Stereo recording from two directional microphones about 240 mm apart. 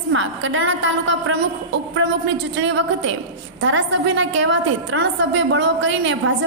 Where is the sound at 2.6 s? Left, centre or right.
Right.